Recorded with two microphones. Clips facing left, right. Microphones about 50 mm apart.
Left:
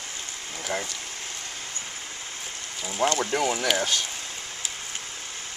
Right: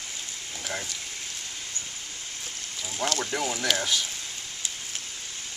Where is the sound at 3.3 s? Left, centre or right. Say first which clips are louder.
Left 4 dB; left.